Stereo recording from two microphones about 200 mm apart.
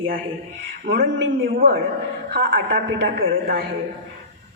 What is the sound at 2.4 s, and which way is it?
A woman's voice, 55° right (ahead or behind).